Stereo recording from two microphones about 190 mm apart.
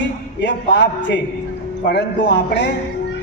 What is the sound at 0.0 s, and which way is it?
A man's voice, 65° left (ahead or behind).